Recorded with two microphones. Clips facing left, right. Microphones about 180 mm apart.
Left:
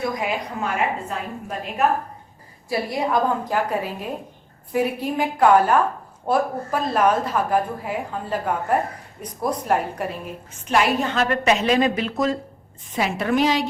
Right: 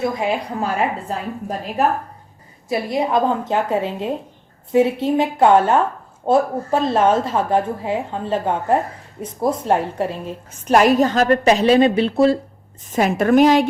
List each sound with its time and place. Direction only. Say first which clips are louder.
0.0 s a woman's voice: right 4 dB; 30° right (ahead or behind)
2.6 s a woman's voice: right 3 dB; 20° right (ahead or behind)
10.7 s a woman's voice: right 7 dB; 40° right (ahead or behind)
12.9 s a woman's voice: right 7 dB; 45° right (ahead or behind)